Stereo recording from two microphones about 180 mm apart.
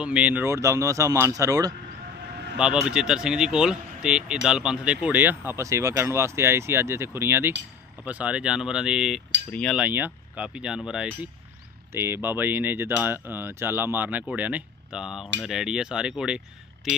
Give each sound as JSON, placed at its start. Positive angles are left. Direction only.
{"t": 0.0, "sound": "speech", "side_deg": -5}
{"t": 2.5, "sound": "speech", "side_deg": -5}
{"t": 9.8, "sound": "speech", "side_deg": -10}